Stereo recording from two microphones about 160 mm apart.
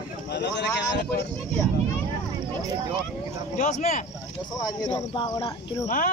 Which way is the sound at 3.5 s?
50° left (ahead or behind).